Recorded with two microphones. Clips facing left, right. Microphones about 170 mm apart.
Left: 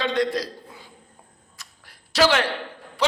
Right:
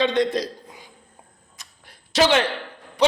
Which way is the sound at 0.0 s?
20° right (ahead or behind).